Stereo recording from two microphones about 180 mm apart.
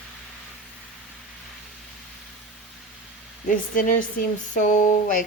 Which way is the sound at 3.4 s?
50° left (ahead or behind).